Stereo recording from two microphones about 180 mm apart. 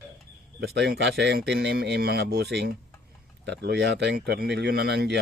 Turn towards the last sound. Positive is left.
turn(degrees=-65)  # may be behind; listen again after turning